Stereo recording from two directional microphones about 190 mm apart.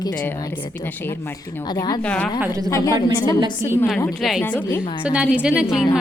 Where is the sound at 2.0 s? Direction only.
5° left (ahead or behind).